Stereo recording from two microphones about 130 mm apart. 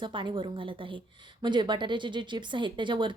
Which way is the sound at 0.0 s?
40° right (ahead or behind).